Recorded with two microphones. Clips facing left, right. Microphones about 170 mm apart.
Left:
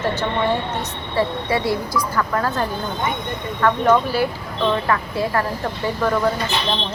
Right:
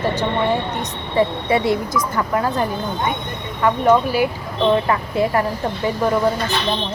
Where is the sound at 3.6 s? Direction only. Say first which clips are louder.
Right 1 dB; 10° right (ahead or behind).